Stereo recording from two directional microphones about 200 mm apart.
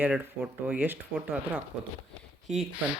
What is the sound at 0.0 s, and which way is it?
Speech, 5° right (ahead or behind).